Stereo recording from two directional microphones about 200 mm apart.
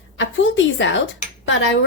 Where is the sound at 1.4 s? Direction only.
70° left (ahead or behind).